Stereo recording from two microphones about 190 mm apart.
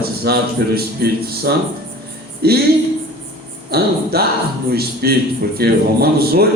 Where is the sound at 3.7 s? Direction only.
55° right (ahead or behind).